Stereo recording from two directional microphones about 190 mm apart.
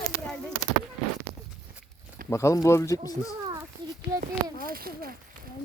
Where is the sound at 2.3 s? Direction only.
15° left (ahead or behind).